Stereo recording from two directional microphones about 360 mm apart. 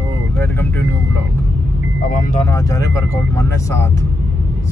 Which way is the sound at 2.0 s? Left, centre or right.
Left.